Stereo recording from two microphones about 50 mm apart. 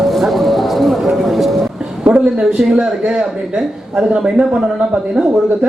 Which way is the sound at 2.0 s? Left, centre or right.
Centre.